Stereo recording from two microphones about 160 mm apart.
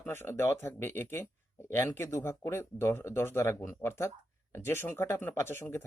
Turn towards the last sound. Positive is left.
turn(degrees=15)  # may be behind; listen again after turning